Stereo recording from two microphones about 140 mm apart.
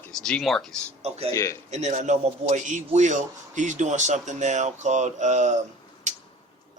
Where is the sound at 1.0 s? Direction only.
45° right (ahead or behind).